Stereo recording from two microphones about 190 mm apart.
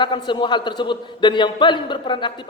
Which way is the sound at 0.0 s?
25° left (ahead or behind).